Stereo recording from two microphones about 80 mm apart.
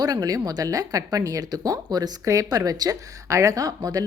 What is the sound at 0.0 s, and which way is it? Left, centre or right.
Speech, right.